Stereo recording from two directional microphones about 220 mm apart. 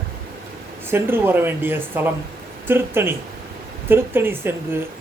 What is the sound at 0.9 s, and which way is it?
Speech, 10° right (ahead or behind).